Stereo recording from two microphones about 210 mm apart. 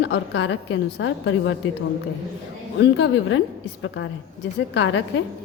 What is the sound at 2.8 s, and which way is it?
Speech, 60° left (ahead or behind).